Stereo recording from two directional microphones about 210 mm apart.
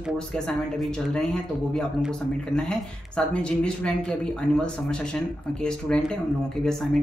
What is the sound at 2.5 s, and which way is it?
Speech, 5° left (ahead or behind).